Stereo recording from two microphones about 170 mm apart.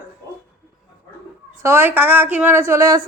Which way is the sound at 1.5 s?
15° right (ahead or behind).